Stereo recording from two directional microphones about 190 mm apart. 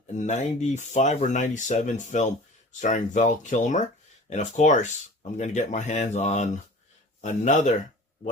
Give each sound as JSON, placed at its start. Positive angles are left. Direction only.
{"t": 0.2, "sound": "speech", "side_deg": 40}